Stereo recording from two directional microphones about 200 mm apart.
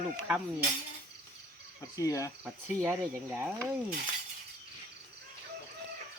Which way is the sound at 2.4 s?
10° right (ahead or behind).